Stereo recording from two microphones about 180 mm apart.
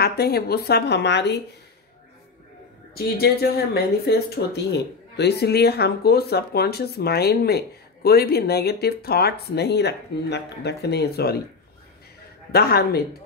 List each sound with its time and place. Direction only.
0.0 s speech: 60° left (ahead or behind)
2.9 s speech: 60° left (ahead or behind)
12.5 s speech: 60° left (ahead or behind)